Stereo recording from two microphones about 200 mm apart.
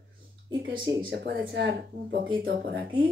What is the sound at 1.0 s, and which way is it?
Speech, 65° right (ahead or behind).